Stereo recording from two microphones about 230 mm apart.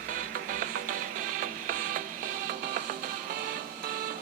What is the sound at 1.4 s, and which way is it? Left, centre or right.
Music, right.